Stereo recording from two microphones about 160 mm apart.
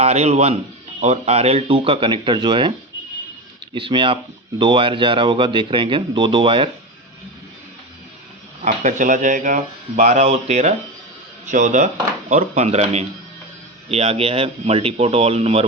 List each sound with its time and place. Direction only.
0.0 s speech: 40° right (ahead or behind)
3.8 s speech: 30° right (ahead or behind)
8.6 s speech: 50° right (ahead or behind)